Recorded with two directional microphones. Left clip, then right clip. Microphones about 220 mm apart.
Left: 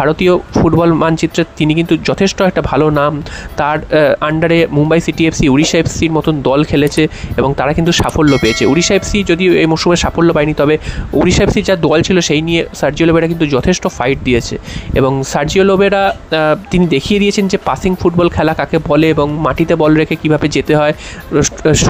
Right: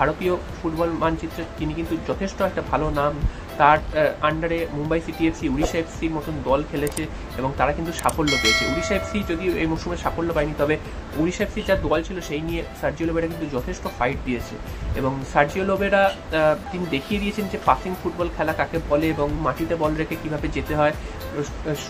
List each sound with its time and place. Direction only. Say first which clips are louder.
0.0 s speech: left 11 dB; 50° left (ahead or behind)
8.3 s speech: left 7 dB; centre (ahead or behind)
8.7 s speech: left 12 dB; 45° left (ahead or behind)